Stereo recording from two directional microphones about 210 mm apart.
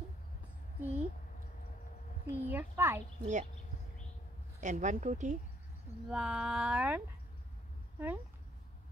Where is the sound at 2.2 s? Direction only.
10° right (ahead or behind).